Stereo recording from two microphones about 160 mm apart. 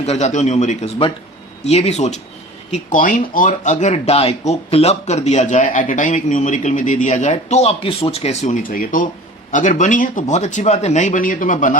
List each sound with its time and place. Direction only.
0.0 s speech: 45° left (ahead or behind)
2.7 s speech: 55° left (ahead or behind)